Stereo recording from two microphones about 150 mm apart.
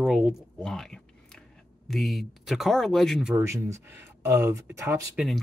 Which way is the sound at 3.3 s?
20° right (ahead or behind).